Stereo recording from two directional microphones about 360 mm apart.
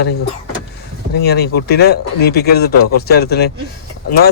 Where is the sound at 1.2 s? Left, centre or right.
Left.